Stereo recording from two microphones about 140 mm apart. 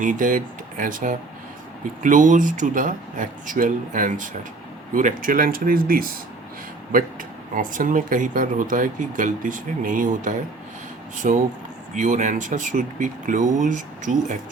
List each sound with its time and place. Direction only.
0.0 s speech: 70° right (ahead or behind); by 6.1 s 90° right
6.9 s speech: 75° right (ahead or behind)